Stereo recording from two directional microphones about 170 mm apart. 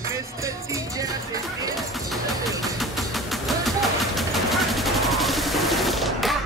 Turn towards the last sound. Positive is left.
turn(degrees=0)  # may be behind; listen again after turning